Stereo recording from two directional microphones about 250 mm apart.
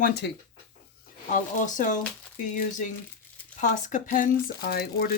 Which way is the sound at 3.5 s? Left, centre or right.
Left.